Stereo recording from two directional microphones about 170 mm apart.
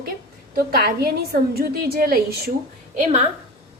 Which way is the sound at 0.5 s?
60° right (ahead or behind).